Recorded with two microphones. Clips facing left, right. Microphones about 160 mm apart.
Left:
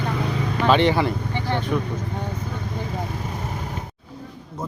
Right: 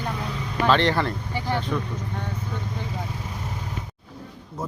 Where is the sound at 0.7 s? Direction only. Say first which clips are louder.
Left 3 dB; 5° left (ahead or behind).